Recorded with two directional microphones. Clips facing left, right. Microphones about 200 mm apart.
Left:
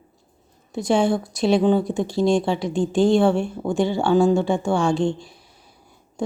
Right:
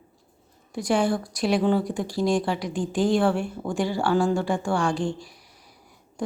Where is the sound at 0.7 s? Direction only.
25° left (ahead or behind).